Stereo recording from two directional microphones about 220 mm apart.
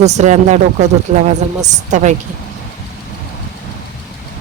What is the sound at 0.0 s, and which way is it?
Speech, 30° right (ahead or behind).